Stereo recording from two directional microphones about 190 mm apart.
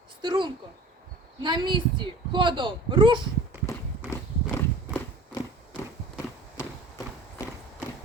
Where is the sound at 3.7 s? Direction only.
15° left (ahead or behind).